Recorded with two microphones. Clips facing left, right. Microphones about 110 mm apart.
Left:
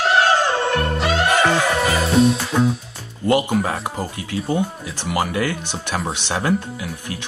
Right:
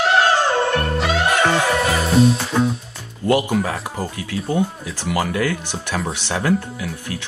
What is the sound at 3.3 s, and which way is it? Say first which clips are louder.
Speech: even; 20° left (ahead or behind).